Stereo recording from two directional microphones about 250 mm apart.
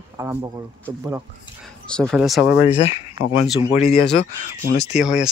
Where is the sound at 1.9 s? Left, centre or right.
Centre.